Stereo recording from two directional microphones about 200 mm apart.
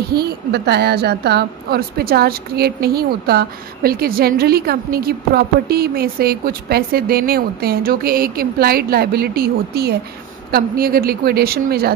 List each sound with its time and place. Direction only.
0.1 s a woman's voice: 55° right (ahead or behind)